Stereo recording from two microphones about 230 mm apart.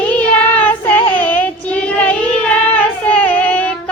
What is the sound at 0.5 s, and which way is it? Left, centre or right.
Child singing, centre.